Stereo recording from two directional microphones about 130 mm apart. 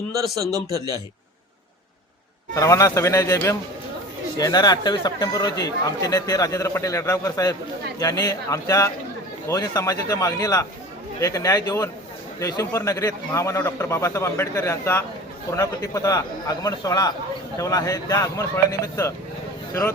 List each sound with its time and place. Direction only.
2.6 s speech: 25° left (ahead or behind)